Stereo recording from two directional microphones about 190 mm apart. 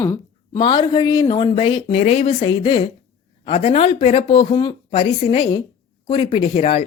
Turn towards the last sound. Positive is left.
turn(degrees=35)  # may be behind; listen again after turning